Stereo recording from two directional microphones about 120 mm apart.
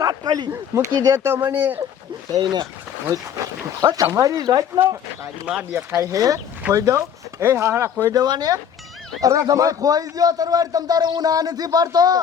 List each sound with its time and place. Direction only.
0.0 s speech: 35° right (ahead or behind)
1.2 s speech: 20° right (ahead or behind)
2.3 s a man's voice: 35° right (ahead or behind)
3.8 s a man's voice: 35° right (ahead or behind)
5.7 s a man's voice: 20° right (ahead or behind)